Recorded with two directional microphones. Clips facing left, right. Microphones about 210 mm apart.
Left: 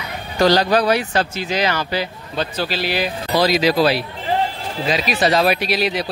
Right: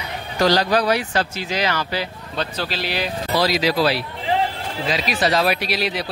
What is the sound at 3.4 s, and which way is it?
Speech, 20° left (ahead or behind).